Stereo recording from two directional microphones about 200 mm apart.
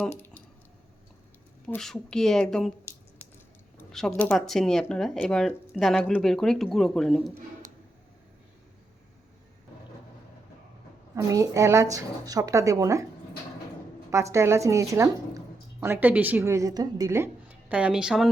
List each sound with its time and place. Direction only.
0.1 s a sound: 10° left (ahead or behind)
1.6 s speech: 5° left (ahead or behind)
3.8 s speech: 5° left (ahead or behind)
11.1 s a woman's voice: 15° right (ahead or behind)
14.3 s a woman's voice: 15° right (ahead or behind)